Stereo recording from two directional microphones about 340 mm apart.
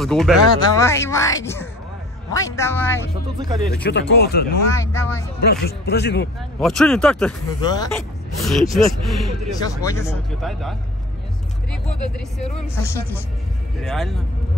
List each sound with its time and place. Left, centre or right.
0.0 s speech: centre
3.3 s speech: centre
3.7 s speech: left
4.7 s speech: centre
5.5 s speech: left
6.6 s speech: centre
8.4 s speech: centre
12.7 s speech: centre